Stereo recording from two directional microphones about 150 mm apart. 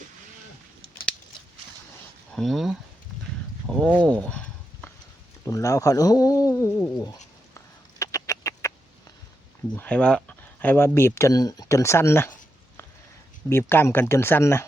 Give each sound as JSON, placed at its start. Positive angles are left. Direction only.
{"t": 2.3, "sound": "speech", "side_deg": 0}
{"t": 3.7, "sound": "a sound", "side_deg": 5}
{"t": 5.5, "sound": "speech", "side_deg": 20}
{"t": 7.5, "sound": "bird", "side_deg": 20}
{"t": 9.7, "sound": "speech", "side_deg": 10}
{"t": 13.5, "sound": "speech", "side_deg": 15}